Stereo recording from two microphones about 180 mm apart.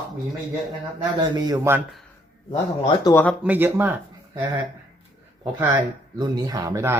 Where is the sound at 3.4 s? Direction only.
10° right (ahead or behind).